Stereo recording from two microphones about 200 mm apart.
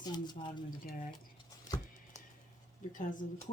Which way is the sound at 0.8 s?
45° left (ahead or behind).